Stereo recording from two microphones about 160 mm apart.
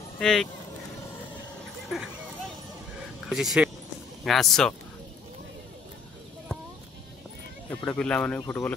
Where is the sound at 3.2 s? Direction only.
Centre (ahead or behind).